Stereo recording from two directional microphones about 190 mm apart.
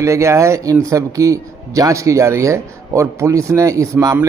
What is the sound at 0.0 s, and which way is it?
Speech, 15° right (ahead or behind).